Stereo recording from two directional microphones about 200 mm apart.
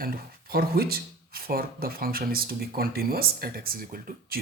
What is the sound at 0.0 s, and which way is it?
Speech, 50° right (ahead or behind).